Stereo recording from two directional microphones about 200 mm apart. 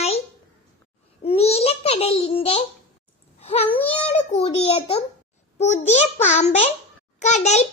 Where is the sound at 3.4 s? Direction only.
30° left (ahead or behind).